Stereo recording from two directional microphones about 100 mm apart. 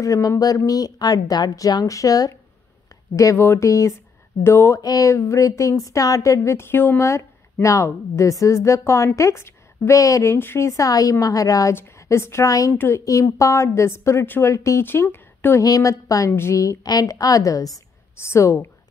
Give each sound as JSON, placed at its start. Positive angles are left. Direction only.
{"t": 0.0, "sound": "a woman's voice", "side_deg": 35}
{"t": 15.6, "sound": "speech", "side_deg": 35}